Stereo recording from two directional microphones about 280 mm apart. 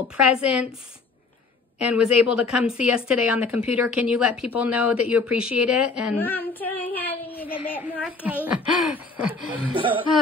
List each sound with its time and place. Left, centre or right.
0.2 s speech: centre
1.8 s speech: centre
6.1 s child singing: centre
7.8 s speech: centre
9.7 s speech: centre